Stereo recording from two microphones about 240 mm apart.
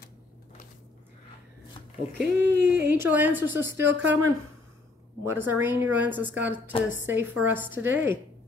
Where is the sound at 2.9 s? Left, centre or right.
Centre.